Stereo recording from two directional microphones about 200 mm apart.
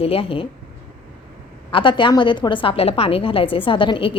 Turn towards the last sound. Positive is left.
turn(degrees=25)  # may be behind; listen again after turning